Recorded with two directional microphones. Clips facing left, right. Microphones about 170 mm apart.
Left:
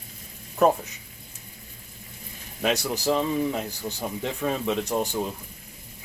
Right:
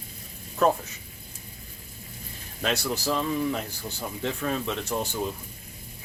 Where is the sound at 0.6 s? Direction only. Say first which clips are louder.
Left 2 dB; 15° left (ahead or behind).